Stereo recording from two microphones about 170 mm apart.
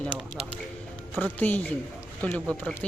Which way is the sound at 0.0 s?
5° left (ahead or behind).